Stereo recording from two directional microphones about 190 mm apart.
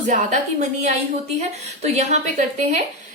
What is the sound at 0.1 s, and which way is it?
A woman's voice, 40° right (ahead or behind).